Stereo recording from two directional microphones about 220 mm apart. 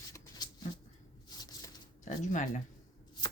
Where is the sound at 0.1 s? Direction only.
15° left (ahead or behind).